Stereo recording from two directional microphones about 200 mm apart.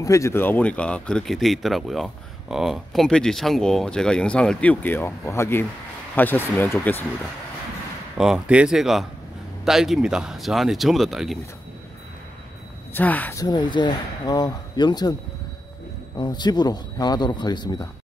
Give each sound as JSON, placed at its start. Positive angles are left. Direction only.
{"t": 0.0, "sound": "speech", "side_deg": 15}
{"t": 8.2, "sound": "speech", "side_deg": -5}
{"t": 12.9, "sound": "speech", "side_deg": 10}
{"t": 16.2, "sound": "speech", "side_deg": 20}